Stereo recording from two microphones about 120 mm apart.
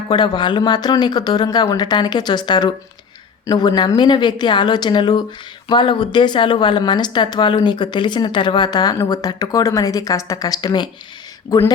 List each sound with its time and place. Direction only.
0.1 s a woman's voice: 40° left (ahead or behind)